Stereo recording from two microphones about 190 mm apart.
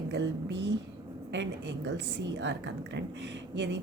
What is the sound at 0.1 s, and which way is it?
A woman's voice, 65° right (ahead or behind).